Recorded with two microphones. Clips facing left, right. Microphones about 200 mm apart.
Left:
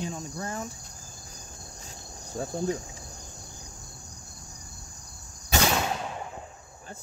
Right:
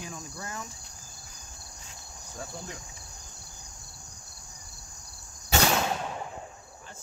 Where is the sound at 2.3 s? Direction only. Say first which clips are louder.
Left 11 dB; 40° left (ahead or behind).